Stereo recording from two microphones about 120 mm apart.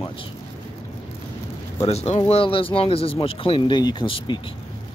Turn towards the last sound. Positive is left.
turn(degrees=40)  # may be behind; listen again after turning